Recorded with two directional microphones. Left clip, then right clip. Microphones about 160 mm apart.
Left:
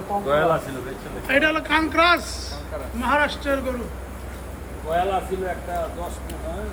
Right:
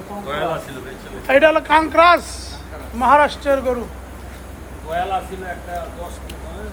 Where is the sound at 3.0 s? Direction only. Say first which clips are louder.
Right 8 dB; 15° right (ahead or behind).